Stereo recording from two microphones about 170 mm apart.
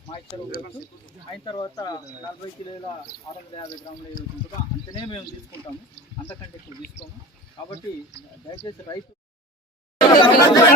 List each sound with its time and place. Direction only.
1.5 s speech: 30° left (ahead or behind)
4.9 s speech: 30° left (ahead or behind)
6.7 s speech: 20° right (ahead or behind)
7.6 s speech: 25° left (ahead or behind)
10.0 s chatter: 25° left (ahead or behind)